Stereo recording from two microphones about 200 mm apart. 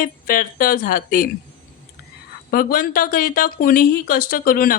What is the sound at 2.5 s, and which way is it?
Speech, 45° left (ahead or behind).